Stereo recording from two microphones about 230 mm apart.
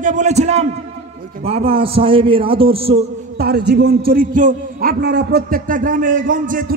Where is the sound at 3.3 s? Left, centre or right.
Right.